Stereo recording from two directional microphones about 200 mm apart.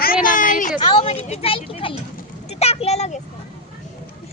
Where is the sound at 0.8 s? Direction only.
25° left (ahead or behind).